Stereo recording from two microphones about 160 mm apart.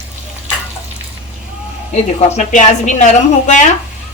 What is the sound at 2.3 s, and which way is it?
A woman's voice, 45° left (ahead or behind).